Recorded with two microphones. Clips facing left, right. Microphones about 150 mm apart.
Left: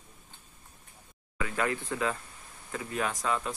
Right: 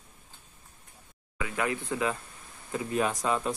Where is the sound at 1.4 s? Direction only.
15° right (ahead or behind).